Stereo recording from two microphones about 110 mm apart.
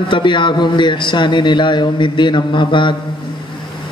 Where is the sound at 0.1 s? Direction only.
45° left (ahead or behind).